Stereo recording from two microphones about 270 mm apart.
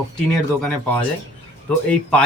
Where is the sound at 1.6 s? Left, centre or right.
Centre.